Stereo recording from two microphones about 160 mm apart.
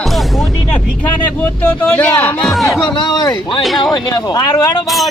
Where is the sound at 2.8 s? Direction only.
25° left (ahead or behind).